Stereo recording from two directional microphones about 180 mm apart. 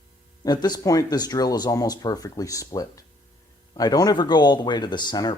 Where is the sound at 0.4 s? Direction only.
25° left (ahead or behind).